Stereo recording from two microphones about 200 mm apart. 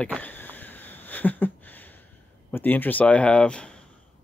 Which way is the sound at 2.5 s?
10° left (ahead or behind).